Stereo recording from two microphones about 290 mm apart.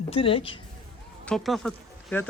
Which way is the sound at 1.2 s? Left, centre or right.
Centre.